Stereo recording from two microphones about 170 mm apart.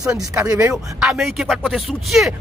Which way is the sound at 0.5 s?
5° right (ahead or behind).